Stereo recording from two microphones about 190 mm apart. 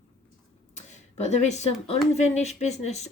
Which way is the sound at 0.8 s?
40° left (ahead or behind).